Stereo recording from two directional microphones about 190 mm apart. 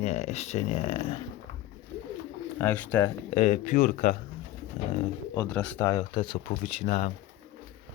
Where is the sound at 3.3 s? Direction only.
35° left (ahead or behind).